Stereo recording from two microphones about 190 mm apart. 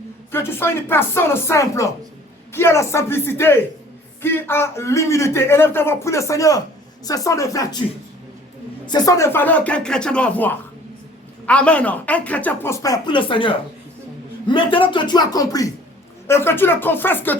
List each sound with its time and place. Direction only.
0.3 s a man's voice: 10° left (ahead or behind)
8.9 s a man's voice: 20° left (ahead or behind)